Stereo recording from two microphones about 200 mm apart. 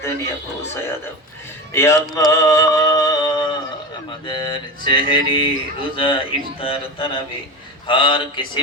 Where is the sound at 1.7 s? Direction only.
15° left (ahead or behind).